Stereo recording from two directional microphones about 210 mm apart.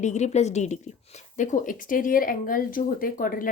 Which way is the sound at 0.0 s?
35° left (ahead or behind).